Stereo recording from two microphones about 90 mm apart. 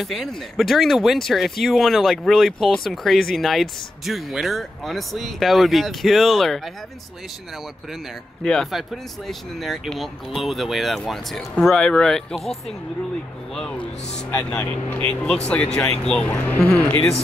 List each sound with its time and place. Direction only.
0.0 s speech: centre (ahead or behind)
8.7 s speech: centre (ahead or behind)
14.9 s speech: 15° left (ahead or behind)